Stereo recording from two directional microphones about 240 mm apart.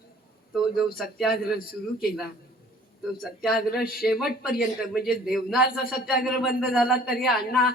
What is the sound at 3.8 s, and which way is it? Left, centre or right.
Speech, left.